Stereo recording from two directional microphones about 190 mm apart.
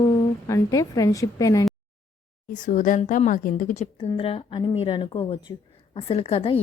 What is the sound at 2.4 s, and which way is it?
A woman's voice, 40° left (ahead or behind).